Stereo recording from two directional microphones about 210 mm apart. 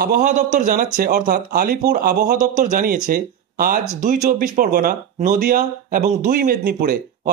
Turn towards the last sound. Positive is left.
turn(degrees=-45)  # may be behind; listen again after turning